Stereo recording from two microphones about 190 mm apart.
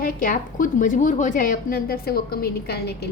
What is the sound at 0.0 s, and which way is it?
A woman's voice, 45° left (ahead or behind).